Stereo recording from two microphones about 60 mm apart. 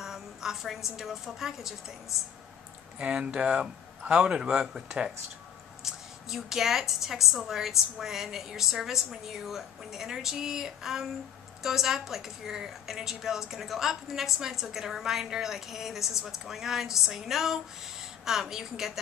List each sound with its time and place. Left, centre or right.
0.0 s a sound: centre
0.9 s a woman's voice: centre
3.0 s a woman's voice: centre